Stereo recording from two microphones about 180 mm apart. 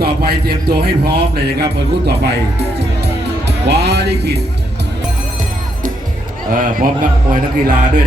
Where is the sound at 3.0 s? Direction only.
65° right (ahead or behind).